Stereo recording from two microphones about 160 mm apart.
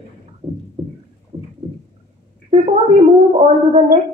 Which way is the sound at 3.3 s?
40° right (ahead or behind).